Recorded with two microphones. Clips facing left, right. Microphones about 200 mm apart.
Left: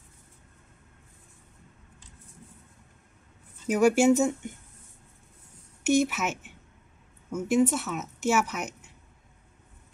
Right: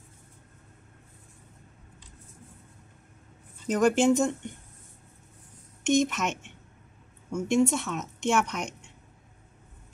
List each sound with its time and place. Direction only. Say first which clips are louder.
3.6 s speech: left 1 dB; 10° left (ahead or behind)
5.9 s a woman's voice: even; 5° left (ahead or behind)